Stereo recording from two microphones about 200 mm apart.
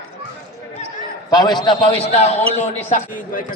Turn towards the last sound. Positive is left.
turn(degrees=35)  # may be behind; listen again after turning